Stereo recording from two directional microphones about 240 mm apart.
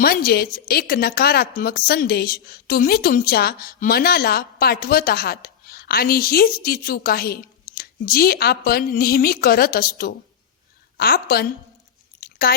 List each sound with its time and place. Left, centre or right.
0.0 s a woman's voice: left
12.2 s chewing: left